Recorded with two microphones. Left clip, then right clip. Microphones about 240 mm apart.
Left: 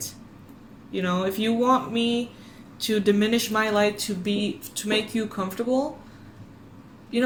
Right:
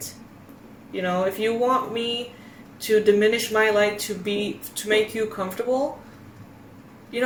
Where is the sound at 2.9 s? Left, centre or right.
Left.